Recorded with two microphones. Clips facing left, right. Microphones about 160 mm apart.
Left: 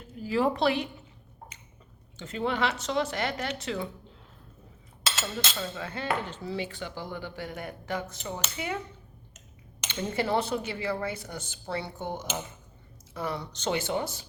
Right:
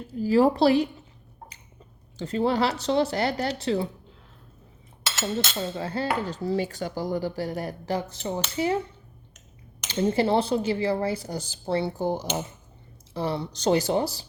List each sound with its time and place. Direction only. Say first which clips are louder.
0.1 s speech: right 7 dB; 35° right (ahead or behind)
2.1 s speech: right 6 dB; 35° right (ahead or behind)
5.2 s speech: right 7 dB; 30° right (ahead or behind)
9.9 s speech: right 6 dB; 30° right (ahead or behind)